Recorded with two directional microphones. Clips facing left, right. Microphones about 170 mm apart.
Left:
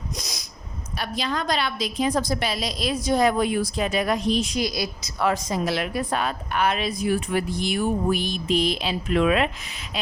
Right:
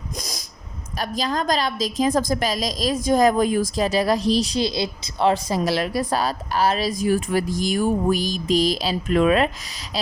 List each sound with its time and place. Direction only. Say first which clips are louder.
0.9 s a woman's voice: right 3 dB; 40° right (ahead or behind)